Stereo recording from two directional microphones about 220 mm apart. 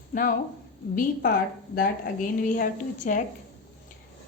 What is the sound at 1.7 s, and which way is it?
Speech, 40° left (ahead or behind).